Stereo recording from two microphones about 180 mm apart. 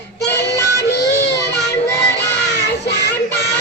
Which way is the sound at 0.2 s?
70° left (ahead or behind).